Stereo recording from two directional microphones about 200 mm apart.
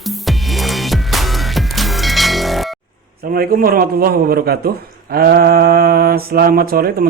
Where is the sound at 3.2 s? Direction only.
50° right (ahead or behind).